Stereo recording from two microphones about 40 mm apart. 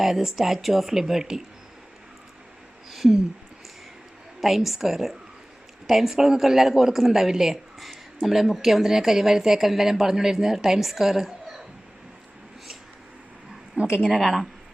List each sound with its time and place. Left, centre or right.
0.0 s a woman's voice: centre
4.4 s a woman's voice: centre
13.7 s a woman's voice: right
14.0 s a woman's voice: centre